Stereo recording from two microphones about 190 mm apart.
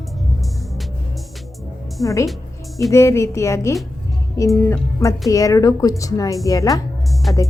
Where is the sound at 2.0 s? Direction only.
15° left (ahead or behind).